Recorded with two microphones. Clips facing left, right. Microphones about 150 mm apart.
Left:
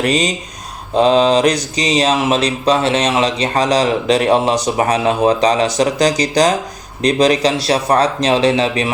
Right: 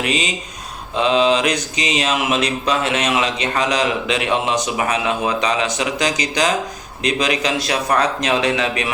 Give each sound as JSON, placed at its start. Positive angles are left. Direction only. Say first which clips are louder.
{"t": 0.0, "sound": "mantra", "louder": "left 5 dB", "side_deg": 40}